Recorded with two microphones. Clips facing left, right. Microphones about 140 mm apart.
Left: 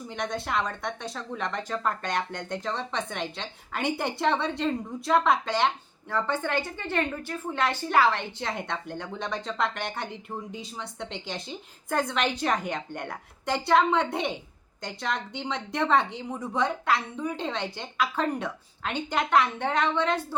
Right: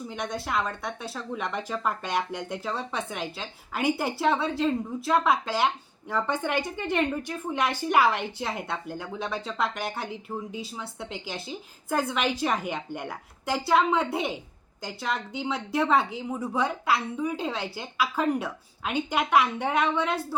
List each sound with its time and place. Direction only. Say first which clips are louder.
0.1 s a woman's voice: left 1 dB; centre (ahead or behind)